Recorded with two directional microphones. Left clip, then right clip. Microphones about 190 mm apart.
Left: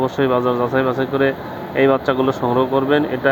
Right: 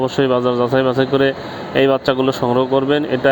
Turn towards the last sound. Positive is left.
turn(degrees=-40)  # may be behind; listen again after turning